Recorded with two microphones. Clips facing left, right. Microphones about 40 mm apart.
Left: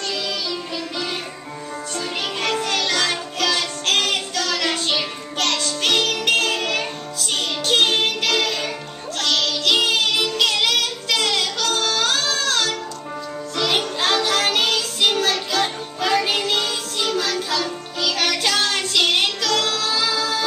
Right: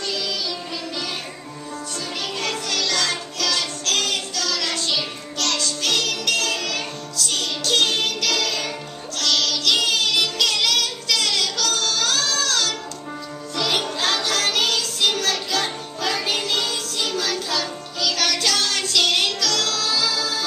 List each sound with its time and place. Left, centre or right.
2.6 s music: left
3.5 s music: left; by 18.1 s centre
18.1 s music: centre